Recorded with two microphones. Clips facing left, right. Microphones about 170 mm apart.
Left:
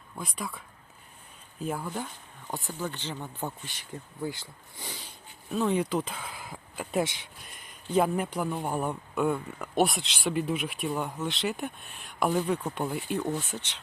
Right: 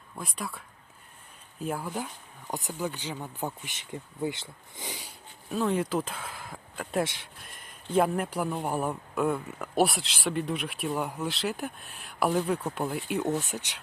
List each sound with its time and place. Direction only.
0.2 s speech: 5° right (ahead or behind)
1.6 s speech: 5° right (ahead or behind)
5.5 s speech: centre (ahead or behind)